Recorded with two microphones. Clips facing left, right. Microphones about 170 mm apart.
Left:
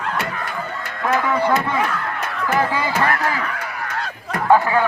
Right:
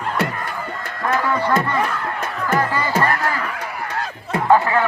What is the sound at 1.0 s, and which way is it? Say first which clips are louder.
A man's voice: left 1 dB; 5° left (ahead or behind).